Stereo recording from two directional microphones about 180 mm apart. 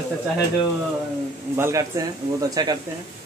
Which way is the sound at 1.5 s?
15° right (ahead or behind).